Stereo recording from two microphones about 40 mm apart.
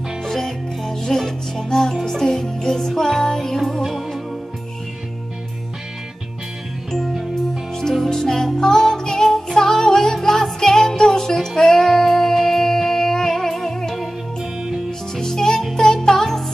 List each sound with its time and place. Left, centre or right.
0.2 s music: centre
7.9 s music: centre
14.4 s music: centre
14.9 s music: centre